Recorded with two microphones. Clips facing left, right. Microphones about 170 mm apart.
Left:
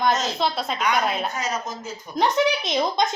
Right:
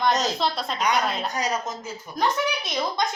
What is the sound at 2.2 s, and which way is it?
Speech, 20° left (ahead or behind).